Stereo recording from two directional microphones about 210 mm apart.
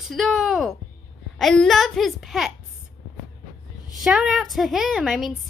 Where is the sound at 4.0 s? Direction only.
Centre (ahead or behind).